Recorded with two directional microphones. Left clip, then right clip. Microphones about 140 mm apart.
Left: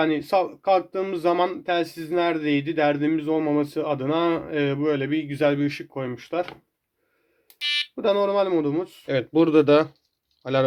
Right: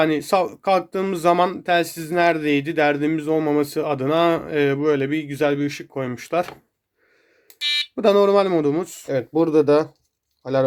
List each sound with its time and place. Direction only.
0.0 s speech: 40° right (ahead or behind); by 5.4 s 25° right (ahead or behind)
5.4 s speech: 10° right (ahead or behind)
5.9 s speech: 30° right (ahead or behind)
6.1 s speech: 50° right (ahead or behind)
7.9 s speech: 50° right (ahead or behind)
9.0 s speech: 10° right (ahead or behind)